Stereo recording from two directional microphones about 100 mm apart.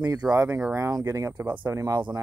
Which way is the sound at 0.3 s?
30° right (ahead or behind).